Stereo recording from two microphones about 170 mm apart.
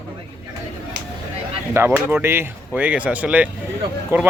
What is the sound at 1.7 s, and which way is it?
Speech, 15° right (ahead or behind).